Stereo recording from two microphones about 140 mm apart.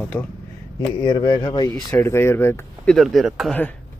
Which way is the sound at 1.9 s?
15° left (ahead or behind).